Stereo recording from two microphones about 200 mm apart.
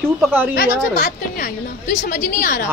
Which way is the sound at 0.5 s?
45° left (ahead or behind).